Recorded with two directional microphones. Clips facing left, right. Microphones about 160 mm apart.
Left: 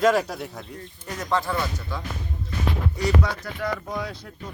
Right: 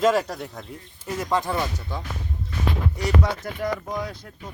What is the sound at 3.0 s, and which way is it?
Speech, 45° right (ahead or behind).